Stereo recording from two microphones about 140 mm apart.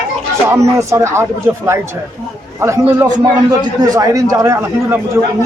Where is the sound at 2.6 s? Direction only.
20° right (ahead or behind).